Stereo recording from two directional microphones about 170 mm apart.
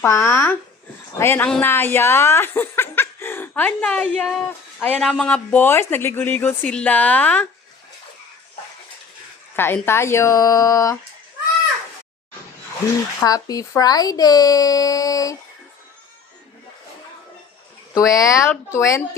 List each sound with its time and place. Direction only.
0.0 s speech: 15° left (ahead or behind)
9.6 s speech: 15° left (ahead or behind)
13.2 s speech: 20° left (ahead or behind)
17.9 s speech: 20° left (ahead or behind)